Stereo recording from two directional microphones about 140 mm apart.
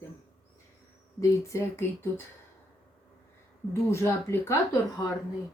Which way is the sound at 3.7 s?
20° left (ahead or behind).